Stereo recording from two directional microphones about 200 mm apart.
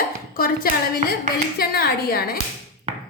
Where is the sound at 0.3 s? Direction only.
45° left (ahead or behind).